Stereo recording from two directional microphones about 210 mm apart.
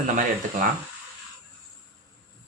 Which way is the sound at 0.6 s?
40° right (ahead or behind).